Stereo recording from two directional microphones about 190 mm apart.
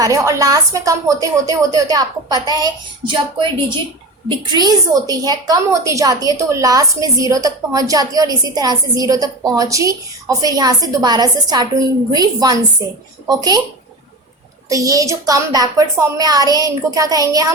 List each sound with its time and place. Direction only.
0.0 s a woman's voice: 15° right (ahead or behind)
14.7 s a woman's voice: 20° right (ahead or behind)